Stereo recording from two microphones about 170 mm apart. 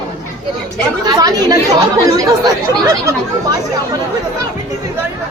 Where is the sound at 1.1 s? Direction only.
20° right (ahead or behind).